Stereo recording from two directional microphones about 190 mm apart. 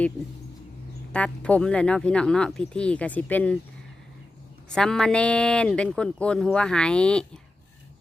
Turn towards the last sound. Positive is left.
turn(degrees=5)  # may be behind; listen again after turning